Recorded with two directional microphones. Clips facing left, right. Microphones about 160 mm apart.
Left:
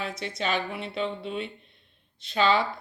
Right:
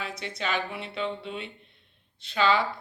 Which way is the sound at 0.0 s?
20° left (ahead or behind).